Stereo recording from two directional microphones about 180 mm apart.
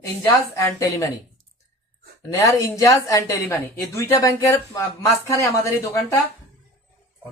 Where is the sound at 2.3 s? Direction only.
15° left (ahead or behind).